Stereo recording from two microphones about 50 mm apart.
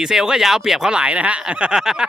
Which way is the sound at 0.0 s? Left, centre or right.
Centre.